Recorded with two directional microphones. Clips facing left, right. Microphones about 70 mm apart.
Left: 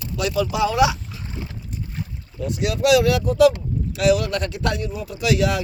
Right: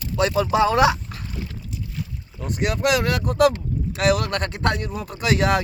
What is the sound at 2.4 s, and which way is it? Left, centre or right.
Speech, right.